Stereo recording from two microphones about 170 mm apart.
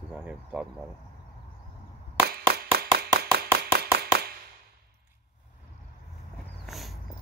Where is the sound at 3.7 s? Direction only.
65° right (ahead or behind).